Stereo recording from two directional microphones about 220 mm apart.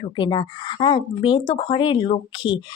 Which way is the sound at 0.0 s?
20° left (ahead or behind).